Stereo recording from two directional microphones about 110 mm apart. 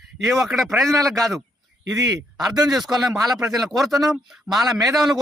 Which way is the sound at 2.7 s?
Centre (ahead or behind).